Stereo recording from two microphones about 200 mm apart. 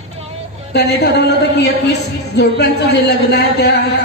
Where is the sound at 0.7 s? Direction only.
55° left (ahead or behind).